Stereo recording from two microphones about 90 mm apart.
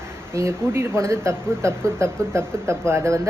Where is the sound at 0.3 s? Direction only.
30° right (ahead or behind).